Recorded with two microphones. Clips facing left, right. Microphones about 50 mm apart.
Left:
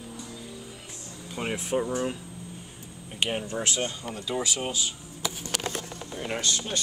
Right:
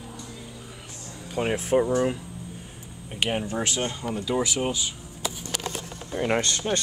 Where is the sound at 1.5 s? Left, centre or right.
Right.